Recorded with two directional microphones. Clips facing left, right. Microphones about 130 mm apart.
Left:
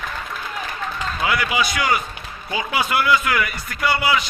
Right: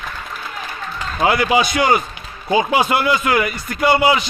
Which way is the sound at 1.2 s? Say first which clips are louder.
Right 7 dB; 30° right (ahead or behind).